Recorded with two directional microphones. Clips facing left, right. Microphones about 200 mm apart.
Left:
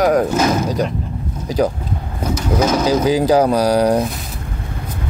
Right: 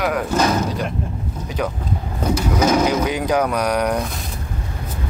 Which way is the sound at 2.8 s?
30° left (ahead or behind).